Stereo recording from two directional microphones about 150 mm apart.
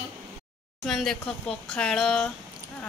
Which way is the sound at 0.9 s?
Centre (ahead or behind).